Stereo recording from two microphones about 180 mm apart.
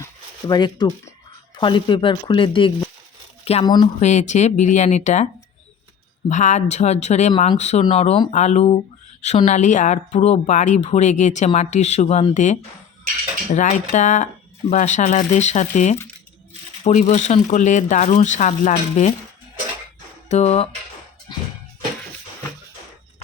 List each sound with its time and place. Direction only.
0.0 s speech: 20° left (ahead or behind)
4.0 s speech: 40° left (ahead or behind)
20.3 s speech: 35° left (ahead or behind)